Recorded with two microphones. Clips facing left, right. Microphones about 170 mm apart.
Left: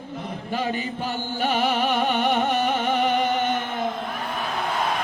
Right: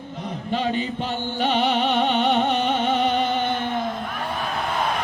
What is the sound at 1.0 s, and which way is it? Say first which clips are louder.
Music: left 1 dB; 5° left (ahead or behind).